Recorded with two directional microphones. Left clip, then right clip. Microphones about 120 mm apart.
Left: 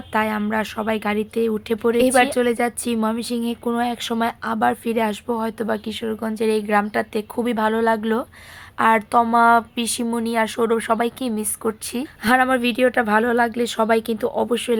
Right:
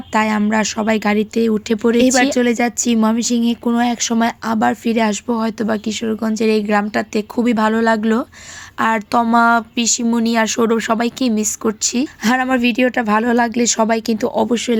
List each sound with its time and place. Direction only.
0.1 s a woman's voice: 30° right (ahead or behind)